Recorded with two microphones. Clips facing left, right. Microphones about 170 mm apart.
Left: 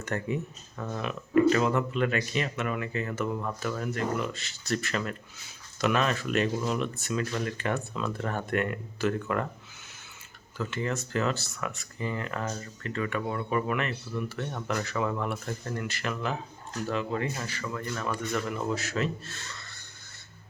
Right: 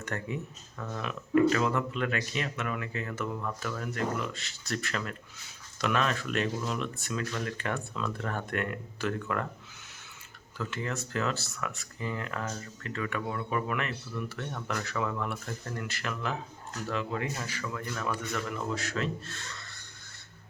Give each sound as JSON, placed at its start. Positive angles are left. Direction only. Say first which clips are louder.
{"t": 0.0, "sound": "speech", "louder": "left 4 dB", "side_deg": 0}
{"t": 0.8, "sound": "speech", "louder": "left 3 dB", "side_deg": 20}
{"t": 1.0, "sound": "speech", "louder": "left 2 dB", "side_deg": 0}
{"t": 10.6, "sound": "speech", "louder": "left 3 dB", "side_deg": 0}